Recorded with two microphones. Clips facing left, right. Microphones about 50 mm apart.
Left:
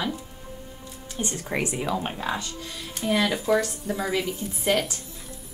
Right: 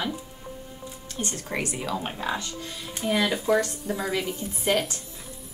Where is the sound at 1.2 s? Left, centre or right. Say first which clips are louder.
Left 2 dB; centre.